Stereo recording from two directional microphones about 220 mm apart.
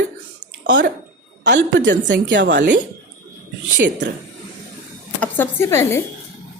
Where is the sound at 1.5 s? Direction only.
55° right (ahead or behind).